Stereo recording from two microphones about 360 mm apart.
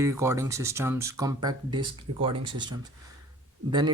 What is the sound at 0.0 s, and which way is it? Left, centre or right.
Speech, centre.